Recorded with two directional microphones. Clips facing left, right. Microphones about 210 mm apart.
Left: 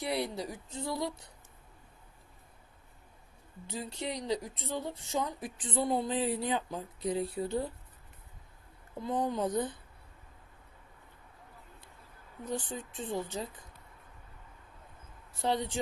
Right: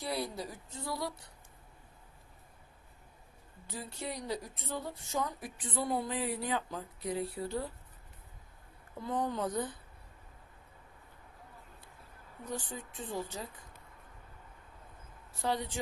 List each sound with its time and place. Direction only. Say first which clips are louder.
0.0 s a woman's voice: left 3 dB; 25° left (ahead or behind)
3.7 s a woman's voice: left 3 dB; 20° left (ahead or behind)
9.0 s a woman's voice: left 2 dB; 15° left (ahead or behind)
12.5 s a woman's voice: left 3 dB; 20° left (ahead or behind)
15.4 s a woman's voice: left 3 dB; 25° left (ahead or behind)